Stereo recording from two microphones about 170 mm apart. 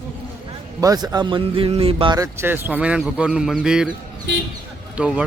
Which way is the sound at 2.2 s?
10° right (ahead or behind).